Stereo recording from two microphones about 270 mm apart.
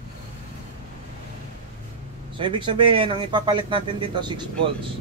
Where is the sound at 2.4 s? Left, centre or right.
Centre.